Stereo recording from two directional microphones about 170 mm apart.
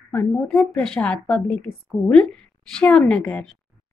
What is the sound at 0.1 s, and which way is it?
A woman's voice, 5° left (ahead or behind).